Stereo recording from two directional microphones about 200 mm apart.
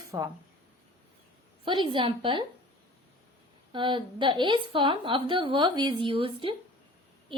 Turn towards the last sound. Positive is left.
turn(degrees=-25)  # may be behind; listen again after turning